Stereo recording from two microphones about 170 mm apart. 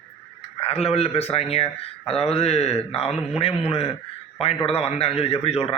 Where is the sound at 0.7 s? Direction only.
35° left (ahead or behind).